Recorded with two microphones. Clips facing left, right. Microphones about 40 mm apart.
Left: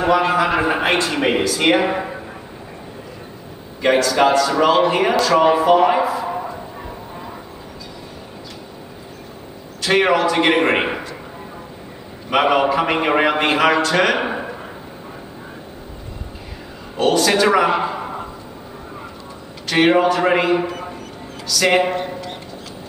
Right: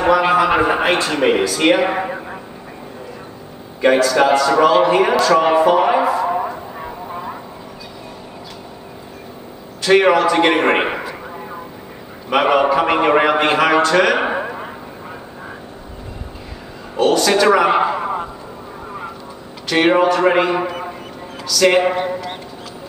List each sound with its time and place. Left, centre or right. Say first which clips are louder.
0.6 s a man's voice: right 2 dB; centre
1.9 s speech: right 2 dB; centre
4.0 s a man's voice: right 2 dB; centre
5.5 s a sound: right 1 dB; centre
9.8 s a man's voice: right 3 dB; centre
10.9 s a sound: right 2 dB; centre
12.3 s a man's voice: right 2 dB; centre
14.2 s a sound: right 4 dB; right
16.9 s a man's voice: right 2 dB; centre
17.6 s a sound: right 4 dB; centre
19.7 s a man's voice: right 1 dB; centre
21.8 s a man's voice: right 4 dB; centre